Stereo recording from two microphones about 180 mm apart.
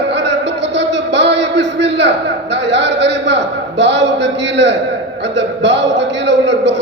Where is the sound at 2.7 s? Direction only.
80° right.